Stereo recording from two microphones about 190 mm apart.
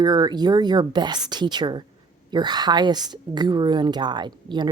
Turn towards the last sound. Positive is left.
turn(degrees=-25)  # may be behind; listen again after turning